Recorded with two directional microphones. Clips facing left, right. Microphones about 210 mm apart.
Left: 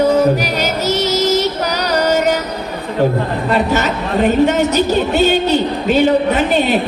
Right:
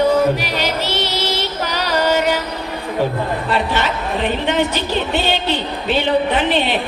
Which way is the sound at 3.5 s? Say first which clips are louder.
Left 5 dB; 45° left (ahead or behind).